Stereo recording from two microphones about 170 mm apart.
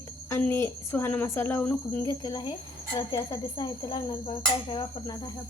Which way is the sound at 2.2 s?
25° left (ahead or behind).